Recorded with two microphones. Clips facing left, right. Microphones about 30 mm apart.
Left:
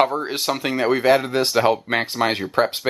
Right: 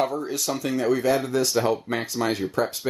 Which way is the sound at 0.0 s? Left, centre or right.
Left.